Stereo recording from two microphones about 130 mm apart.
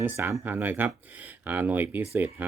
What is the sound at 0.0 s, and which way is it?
Speech, 15° right (ahead or behind).